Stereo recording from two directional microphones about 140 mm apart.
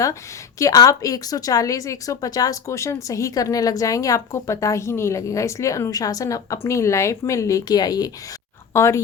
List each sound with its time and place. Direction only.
0.6 s speech: 25° left (ahead or behind)